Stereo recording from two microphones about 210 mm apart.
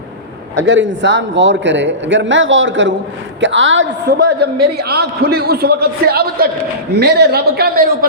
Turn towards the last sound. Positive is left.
turn(degrees=-45)  # may be behind; listen again after turning